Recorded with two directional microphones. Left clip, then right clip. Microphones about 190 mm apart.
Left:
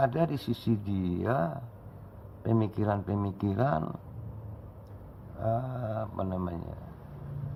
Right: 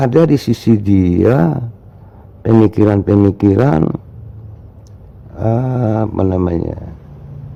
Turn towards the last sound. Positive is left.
turn(degrees=-50)  # may be behind; listen again after turning